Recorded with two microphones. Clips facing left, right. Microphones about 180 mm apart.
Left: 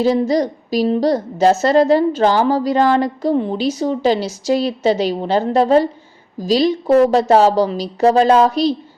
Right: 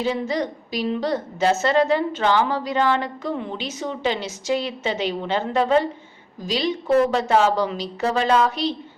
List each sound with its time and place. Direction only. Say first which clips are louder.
0.0 s a woman's voice: left 8 dB; 40° left (ahead or behind)